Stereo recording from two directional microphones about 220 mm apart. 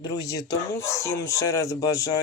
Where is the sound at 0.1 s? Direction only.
15° left (ahead or behind).